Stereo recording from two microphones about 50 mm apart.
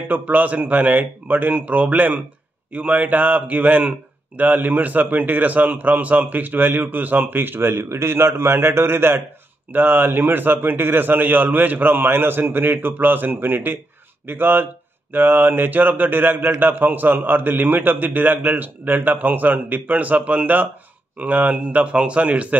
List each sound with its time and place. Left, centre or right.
0.1 s speech: right
9.7 s a man's voice: right